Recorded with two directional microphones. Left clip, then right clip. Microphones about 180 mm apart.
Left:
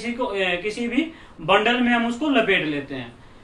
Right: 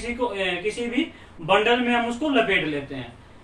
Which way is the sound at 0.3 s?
25° left (ahead or behind).